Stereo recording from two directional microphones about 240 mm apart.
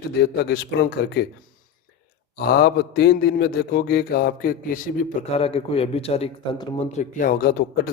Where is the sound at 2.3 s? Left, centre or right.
Left.